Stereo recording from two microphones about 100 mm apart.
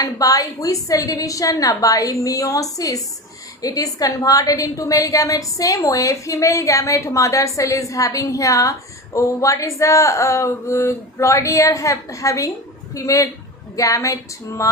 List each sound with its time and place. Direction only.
0.0 s a woman's voice: 35° left (ahead or behind)